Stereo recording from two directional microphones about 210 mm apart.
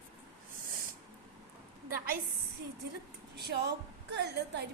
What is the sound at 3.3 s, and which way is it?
A woman's voice, 55° right (ahead or behind).